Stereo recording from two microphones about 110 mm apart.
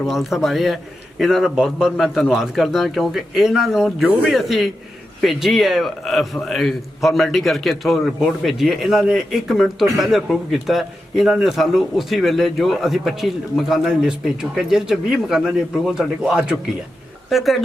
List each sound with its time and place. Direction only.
0.0 s a man's voice: 5° right (ahead or behind)